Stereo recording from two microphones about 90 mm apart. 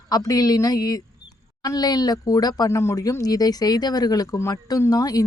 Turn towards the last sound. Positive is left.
turn(degrees=40)  # may be behind; listen again after turning